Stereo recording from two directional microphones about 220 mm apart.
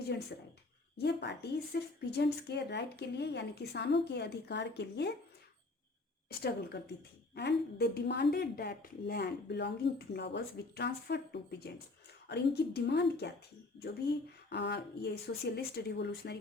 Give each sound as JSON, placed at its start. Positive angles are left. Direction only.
{"t": 0.9, "sound": "speech", "side_deg": 50}
{"t": 6.2, "sound": "speech", "side_deg": 45}